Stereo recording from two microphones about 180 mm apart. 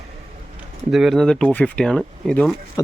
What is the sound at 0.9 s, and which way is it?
Speech, centre (ahead or behind).